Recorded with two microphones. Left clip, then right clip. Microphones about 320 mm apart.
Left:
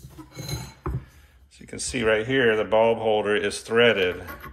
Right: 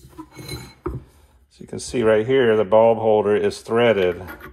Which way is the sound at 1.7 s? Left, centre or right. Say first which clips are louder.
Right 5 dB; centre.